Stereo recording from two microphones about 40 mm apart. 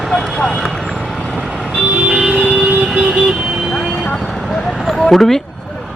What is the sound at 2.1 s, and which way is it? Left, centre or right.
Vehicle, centre.